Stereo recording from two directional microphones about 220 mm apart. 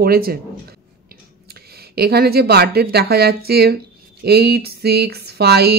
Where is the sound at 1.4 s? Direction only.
45° right (ahead or behind).